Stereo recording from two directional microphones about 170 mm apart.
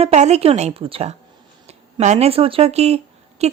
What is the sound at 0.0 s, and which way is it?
Speech, 40° right (ahead or behind).